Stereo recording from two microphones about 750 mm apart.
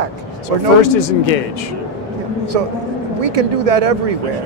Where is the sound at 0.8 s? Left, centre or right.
Left.